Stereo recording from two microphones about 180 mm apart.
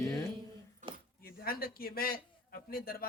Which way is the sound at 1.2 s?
55° left (ahead or behind).